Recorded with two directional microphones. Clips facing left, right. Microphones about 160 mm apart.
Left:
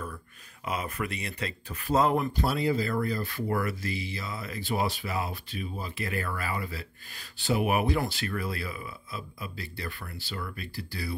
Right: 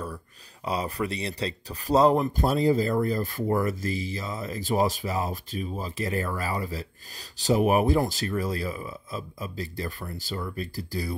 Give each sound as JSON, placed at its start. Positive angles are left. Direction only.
{"t": 0.7, "sound": "speech", "side_deg": -35}